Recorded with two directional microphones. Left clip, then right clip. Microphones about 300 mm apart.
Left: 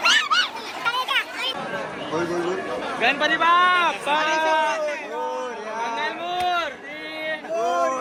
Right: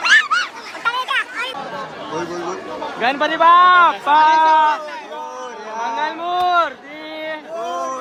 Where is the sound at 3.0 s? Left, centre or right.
Right.